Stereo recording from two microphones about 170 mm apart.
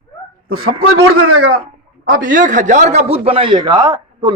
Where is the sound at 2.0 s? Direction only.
55° right (ahead or behind); by 4.3 s 20° right (ahead or behind).